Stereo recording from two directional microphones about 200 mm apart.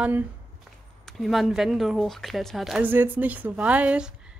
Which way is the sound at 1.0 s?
Centre (ahead or behind).